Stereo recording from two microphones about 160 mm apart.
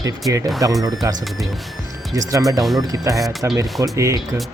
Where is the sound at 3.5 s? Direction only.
20° right (ahead or behind).